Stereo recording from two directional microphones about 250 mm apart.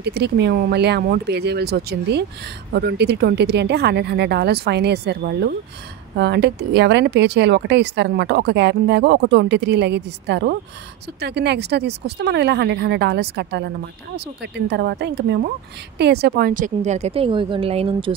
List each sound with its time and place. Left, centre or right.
0.0 s a woman's voice: right